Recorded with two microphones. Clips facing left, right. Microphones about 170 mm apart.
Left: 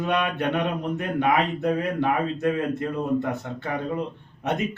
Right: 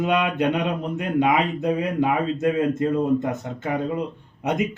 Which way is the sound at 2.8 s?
20° right (ahead or behind).